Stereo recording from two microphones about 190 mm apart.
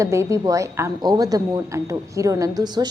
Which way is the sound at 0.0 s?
15° right (ahead or behind).